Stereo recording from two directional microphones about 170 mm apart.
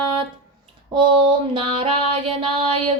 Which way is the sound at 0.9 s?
30° right (ahead or behind).